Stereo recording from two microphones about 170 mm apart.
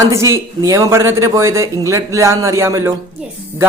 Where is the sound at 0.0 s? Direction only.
15° right (ahead or behind).